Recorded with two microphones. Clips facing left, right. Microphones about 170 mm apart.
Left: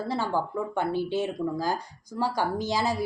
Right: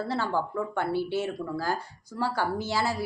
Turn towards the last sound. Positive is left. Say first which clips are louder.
# left 2 dB
turn(degrees=15)  # may be behind; listen again after turning